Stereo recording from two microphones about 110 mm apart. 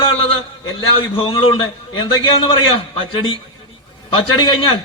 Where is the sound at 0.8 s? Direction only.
50° left (ahead or behind).